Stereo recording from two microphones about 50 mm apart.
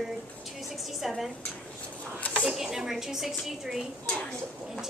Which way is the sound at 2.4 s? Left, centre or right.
Centre.